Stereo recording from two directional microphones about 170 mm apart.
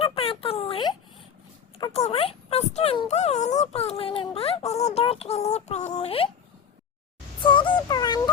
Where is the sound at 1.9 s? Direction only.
35° left (ahead or behind).